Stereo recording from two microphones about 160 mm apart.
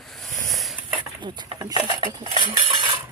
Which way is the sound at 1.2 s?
30° right (ahead or behind).